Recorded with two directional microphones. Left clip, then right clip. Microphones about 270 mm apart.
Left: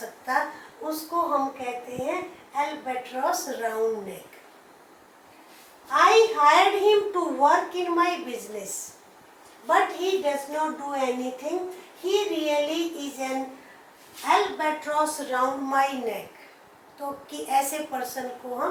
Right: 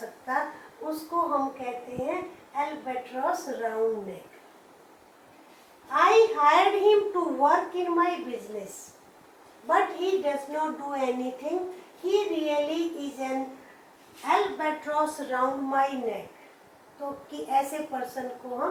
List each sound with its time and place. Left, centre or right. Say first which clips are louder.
0.0 s a sound: left 3 dB; centre
1.5 s a woman's voice: left 2 dB; centre
6.0 s a woman's voice: left 2 dB; centre
7.2 s a woman's voice: left 2 dB; centre
9.6 s a woman's voice: left 2 dB; centre
11.2 s a woman's voice: left 1 dB; right
12.0 s a child's voice: left 1 dB; centre
17.1 s a woman's voice: left 2 dB; right
17.5 s a woman's voice: left 2 dB; centre